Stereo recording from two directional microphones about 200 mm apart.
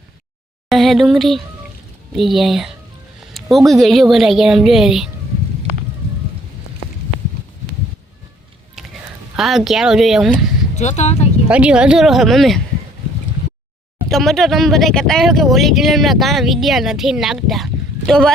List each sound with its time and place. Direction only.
0.7 s speech: centre (ahead or behind)
3.3 s a sound: centre (ahead or behind)
3.7 s speech: centre (ahead or behind)
8.8 s music: 5° right (ahead or behind)
9.3 s speech: centre (ahead or behind)
10.3 s speech: 35° left (ahead or behind)
11.4 s speech: 5° right (ahead or behind)
14.1 s speech: centre (ahead or behind)